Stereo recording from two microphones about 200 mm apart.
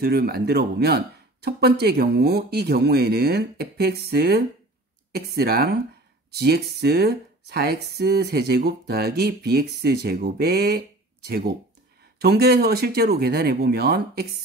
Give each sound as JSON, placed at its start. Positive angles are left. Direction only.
{"t": 0.0, "sound": "speech", "side_deg": -50}